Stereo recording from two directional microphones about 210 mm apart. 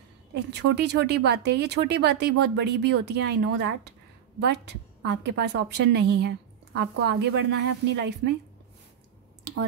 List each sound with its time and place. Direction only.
0.3 s speech: 55° right (ahead or behind)
5.0 s a woman's voice: 55° right (ahead or behind)